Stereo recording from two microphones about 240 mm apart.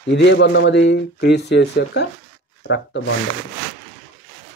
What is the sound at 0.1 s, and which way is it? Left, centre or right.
Speech, left.